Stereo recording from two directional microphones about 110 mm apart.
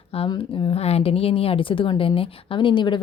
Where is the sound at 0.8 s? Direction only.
65° left (ahead or behind).